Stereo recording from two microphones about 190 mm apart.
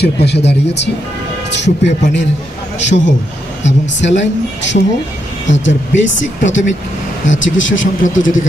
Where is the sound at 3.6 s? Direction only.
70° left (ahead or behind); by 8.3 s 90° left.